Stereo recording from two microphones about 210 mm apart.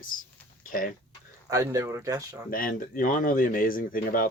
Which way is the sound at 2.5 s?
40° left (ahead or behind).